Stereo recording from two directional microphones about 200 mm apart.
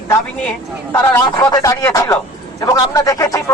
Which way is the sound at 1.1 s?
15° left (ahead or behind).